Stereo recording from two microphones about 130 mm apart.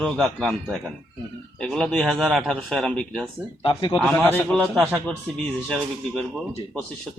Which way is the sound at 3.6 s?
40° left (ahead or behind).